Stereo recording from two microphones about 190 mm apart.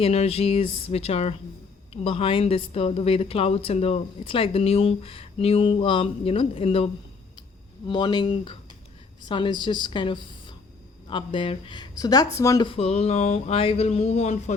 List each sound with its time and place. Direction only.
0.0 s a woman's voice: 35° left (ahead or behind)
7.9 s a woman's voice: 20° left (ahead or behind)